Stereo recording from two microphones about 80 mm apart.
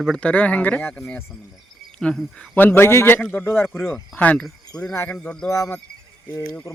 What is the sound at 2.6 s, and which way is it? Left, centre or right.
Speech, left.